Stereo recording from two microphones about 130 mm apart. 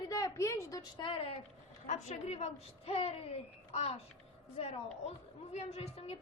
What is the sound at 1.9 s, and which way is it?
A woman's voice, 55° left (ahead or behind).